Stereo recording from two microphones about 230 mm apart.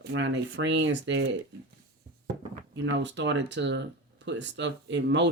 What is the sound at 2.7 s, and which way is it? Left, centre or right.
Speech, right.